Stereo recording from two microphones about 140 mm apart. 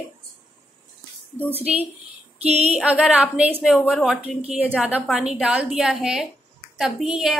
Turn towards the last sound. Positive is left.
turn(degrees=-5)  # may be behind; listen again after turning